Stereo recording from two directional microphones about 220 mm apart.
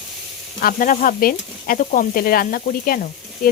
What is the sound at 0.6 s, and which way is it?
Speech, 35° left (ahead or behind).